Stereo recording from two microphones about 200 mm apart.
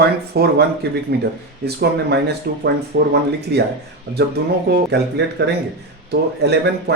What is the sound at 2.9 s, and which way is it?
Speech, 70° right (ahead or behind).